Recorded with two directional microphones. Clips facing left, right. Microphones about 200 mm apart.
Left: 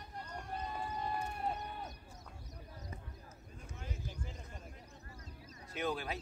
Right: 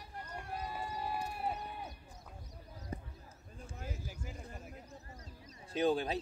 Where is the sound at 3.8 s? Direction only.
10° right (ahead or behind).